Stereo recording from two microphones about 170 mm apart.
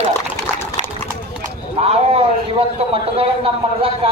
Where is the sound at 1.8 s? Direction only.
35° right (ahead or behind).